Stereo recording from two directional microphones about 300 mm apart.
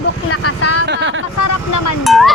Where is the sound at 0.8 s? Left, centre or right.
Right.